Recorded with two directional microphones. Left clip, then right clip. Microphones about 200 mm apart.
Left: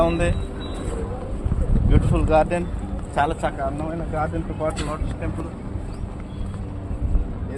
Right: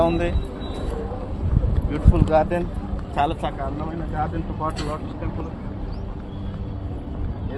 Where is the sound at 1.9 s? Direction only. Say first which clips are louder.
Even; 40° left (ahead or behind).